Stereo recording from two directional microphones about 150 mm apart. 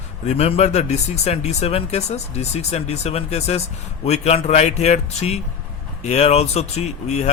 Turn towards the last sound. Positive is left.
turn(degrees=50)  # may be behind; listen again after turning